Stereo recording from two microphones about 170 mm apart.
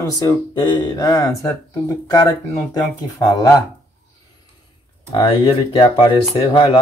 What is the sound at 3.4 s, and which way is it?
Speech, 20° left (ahead or behind).